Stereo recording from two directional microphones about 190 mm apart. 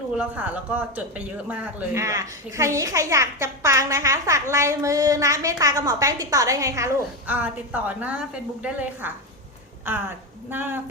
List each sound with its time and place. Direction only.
0.1 s speech: 10° right (ahead or behind)